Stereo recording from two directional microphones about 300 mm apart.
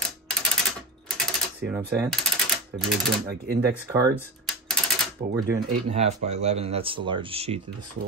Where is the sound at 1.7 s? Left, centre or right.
Centre.